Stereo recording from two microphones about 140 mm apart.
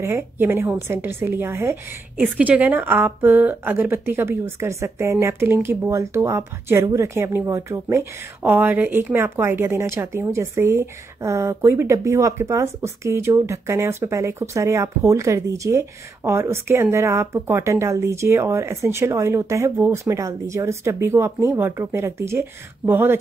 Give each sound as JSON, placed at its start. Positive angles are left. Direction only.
{"t": 0.0, "sound": "a woman's voice", "side_deg": -15}